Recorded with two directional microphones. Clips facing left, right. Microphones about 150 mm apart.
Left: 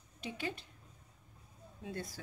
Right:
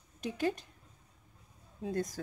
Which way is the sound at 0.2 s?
45° right (ahead or behind).